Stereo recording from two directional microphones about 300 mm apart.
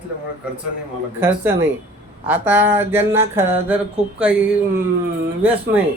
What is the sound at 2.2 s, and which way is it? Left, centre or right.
Speech, centre.